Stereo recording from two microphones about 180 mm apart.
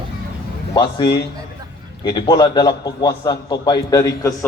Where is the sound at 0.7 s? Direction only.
25° left (ahead or behind).